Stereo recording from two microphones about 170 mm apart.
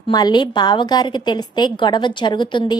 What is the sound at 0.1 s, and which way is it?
A woman's voice, 25° left (ahead or behind).